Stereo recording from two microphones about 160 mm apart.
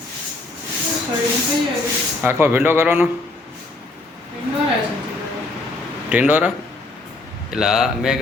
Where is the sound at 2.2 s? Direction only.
15° right (ahead or behind).